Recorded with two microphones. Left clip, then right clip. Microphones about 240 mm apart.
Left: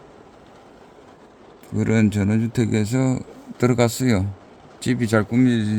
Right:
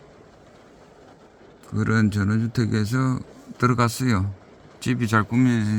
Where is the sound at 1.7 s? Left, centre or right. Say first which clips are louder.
Left 3 dB; centre.